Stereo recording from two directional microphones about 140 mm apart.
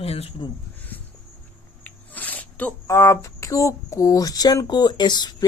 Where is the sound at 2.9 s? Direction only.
20° left (ahead or behind).